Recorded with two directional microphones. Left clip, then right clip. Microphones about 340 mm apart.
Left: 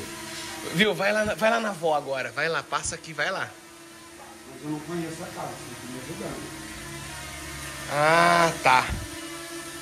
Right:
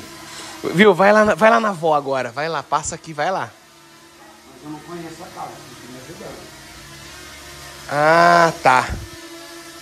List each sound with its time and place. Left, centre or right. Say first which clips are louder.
0.7 s speech: right 11 dB; right
7.9 s speech: right 7 dB; centre